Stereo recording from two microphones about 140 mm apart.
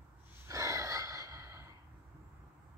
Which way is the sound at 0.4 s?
20° right (ahead or behind).